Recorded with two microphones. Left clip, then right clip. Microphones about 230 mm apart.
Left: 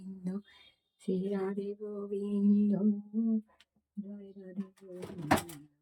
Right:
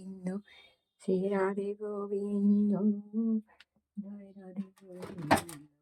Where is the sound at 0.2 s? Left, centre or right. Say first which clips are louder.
Right 2 dB; centre.